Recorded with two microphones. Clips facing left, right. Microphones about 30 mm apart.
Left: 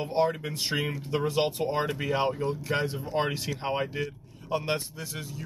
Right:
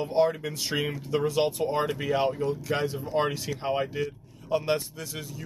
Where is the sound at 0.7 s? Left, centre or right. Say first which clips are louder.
Right 2 dB; centre.